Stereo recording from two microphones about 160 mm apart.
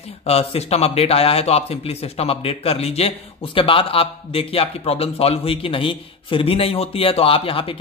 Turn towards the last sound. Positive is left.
turn(degrees=35)  # may be behind; listen again after turning